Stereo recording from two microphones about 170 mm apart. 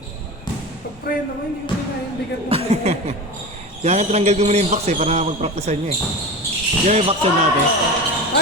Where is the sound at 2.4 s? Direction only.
35° right (ahead or behind).